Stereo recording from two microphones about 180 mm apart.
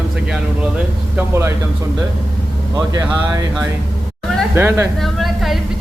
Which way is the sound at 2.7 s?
20° right (ahead or behind).